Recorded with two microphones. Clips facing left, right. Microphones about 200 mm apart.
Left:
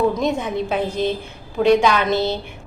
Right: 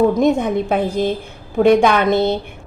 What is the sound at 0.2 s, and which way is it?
A woman's voice, 55° right (ahead or behind).